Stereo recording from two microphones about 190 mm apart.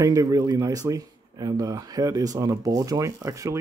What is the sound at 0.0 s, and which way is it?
Speech, 20° right (ahead or behind).